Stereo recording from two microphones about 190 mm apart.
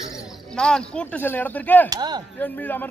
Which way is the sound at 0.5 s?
5° left (ahead or behind).